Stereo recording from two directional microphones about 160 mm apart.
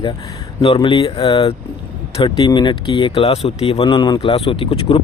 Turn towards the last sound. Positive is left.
turn(degrees=35)  # may be behind; listen again after turning